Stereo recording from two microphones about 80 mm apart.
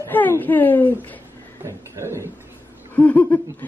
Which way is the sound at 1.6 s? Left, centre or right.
Right.